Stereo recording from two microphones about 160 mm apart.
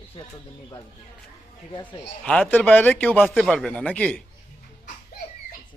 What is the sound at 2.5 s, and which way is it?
Speech, 10° left (ahead or behind).